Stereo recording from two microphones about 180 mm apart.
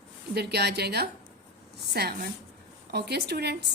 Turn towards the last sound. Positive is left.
turn(degrees=-65)  # may be behind; listen again after turning